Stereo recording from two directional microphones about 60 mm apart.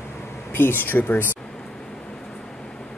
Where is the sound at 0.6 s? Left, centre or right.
Left.